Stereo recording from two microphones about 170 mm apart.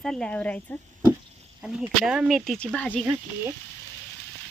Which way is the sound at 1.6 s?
5° right (ahead or behind).